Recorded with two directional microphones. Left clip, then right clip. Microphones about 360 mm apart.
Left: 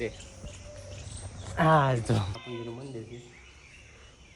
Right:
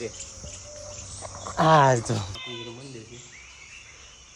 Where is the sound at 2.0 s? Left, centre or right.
Centre.